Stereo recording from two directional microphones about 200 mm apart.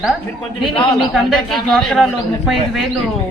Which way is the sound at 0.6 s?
25° left (ahead or behind).